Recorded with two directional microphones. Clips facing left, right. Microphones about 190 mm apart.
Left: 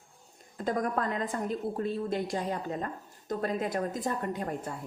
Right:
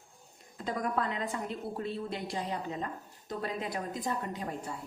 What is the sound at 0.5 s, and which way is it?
A woman's voice, 50° left (ahead or behind).